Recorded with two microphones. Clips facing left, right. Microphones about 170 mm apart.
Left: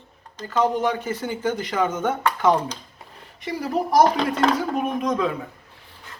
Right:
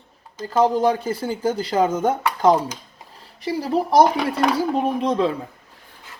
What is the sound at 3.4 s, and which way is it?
Speech, 30° right (ahead or behind).